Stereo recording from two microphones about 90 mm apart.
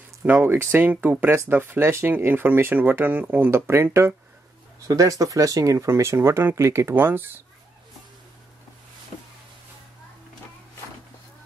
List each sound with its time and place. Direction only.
0.2 s speech: 25° right (ahead or behind)